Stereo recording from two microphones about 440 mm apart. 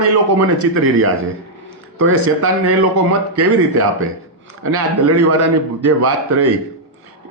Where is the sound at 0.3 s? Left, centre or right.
Right.